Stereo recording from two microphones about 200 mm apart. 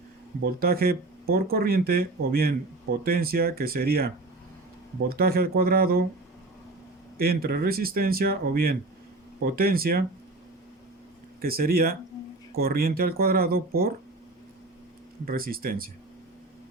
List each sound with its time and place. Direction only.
0.4 s speech: 50° right (ahead or behind)
7.2 s speech: 50° right (ahead or behind)
11.3 s speech: 50° right (ahead or behind)
15.2 s speech: 45° right (ahead or behind)